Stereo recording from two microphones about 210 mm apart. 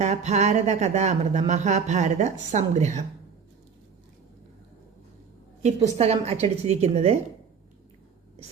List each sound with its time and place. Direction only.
0.0 s speech: 35° right (ahead or behind)
5.6 s speech: 30° right (ahead or behind)